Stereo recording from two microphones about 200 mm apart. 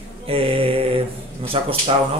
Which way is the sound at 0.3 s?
30° right (ahead or behind).